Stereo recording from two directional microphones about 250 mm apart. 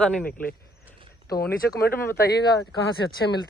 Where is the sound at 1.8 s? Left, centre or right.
Left.